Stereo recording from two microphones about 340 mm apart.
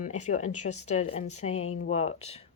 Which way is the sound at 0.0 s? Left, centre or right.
Left.